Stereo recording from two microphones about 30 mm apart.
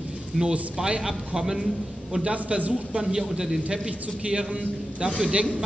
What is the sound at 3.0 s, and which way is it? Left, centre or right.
Speech, centre.